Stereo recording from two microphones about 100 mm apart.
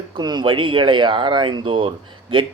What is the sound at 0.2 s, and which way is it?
Speech, 45° right (ahead or behind).